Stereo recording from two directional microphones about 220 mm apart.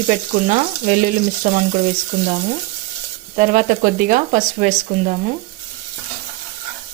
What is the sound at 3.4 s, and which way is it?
Speech, 35° right (ahead or behind).